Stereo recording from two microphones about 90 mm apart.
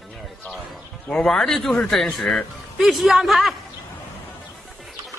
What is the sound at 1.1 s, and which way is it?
Speech, 5° left (ahead or behind).